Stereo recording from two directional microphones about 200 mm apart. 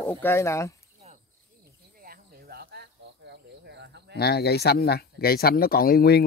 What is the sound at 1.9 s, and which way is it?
Cricket, 45° right (ahead or behind).